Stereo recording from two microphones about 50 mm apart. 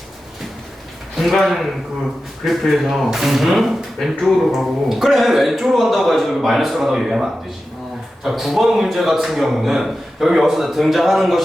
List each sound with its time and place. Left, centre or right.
1.2 s a man's voice: centre